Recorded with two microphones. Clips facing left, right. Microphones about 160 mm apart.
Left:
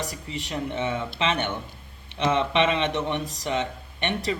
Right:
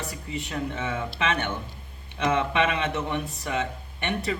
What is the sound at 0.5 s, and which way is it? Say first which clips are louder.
A man's voice: left 3 dB; 20° left (ahead or behind).